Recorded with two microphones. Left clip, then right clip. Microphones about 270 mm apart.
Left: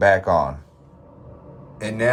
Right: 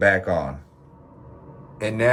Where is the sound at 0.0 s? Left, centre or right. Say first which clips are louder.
Left 3 dB; left.